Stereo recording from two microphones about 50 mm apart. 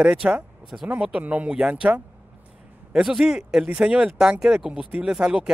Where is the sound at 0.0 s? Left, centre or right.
Centre.